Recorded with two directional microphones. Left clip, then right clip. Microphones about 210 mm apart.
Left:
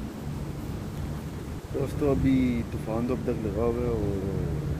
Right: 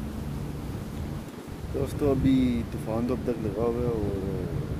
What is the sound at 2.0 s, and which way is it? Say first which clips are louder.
Speech: right 1 dB; 15° right (ahead or behind).